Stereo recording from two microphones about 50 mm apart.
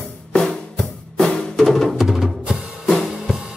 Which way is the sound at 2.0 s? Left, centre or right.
Centre.